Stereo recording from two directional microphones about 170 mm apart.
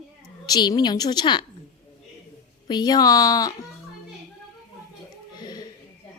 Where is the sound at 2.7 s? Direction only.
25° left (ahead or behind).